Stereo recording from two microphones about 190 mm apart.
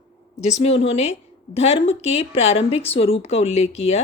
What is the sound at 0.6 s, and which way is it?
Speech, 35° left (ahead or behind).